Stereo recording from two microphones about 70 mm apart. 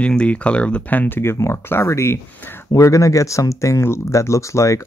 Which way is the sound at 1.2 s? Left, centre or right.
Left.